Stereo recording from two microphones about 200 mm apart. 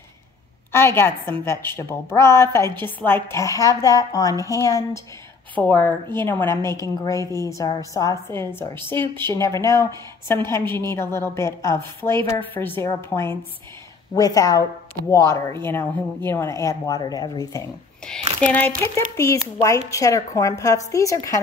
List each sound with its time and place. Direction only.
0.7 s a woman's voice: 10° left (ahead or behind)
18.0 s a woman's voice: 5° left (ahead or behind)